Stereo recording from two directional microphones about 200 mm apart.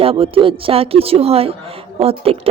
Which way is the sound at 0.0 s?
30° right (ahead or behind).